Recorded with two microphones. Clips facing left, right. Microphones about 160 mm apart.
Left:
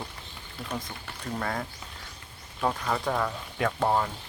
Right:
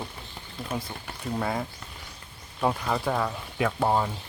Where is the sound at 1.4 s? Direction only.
10° right (ahead or behind).